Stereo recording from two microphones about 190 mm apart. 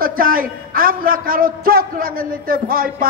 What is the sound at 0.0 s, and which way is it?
A man's voice, 50° right (ahead or behind).